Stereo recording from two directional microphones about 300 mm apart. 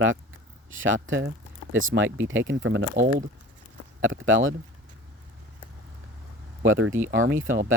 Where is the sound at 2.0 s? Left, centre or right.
Centre.